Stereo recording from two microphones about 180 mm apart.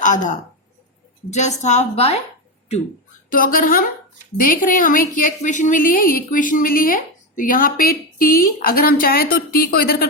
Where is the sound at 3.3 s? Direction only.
50° left (ahead or behind).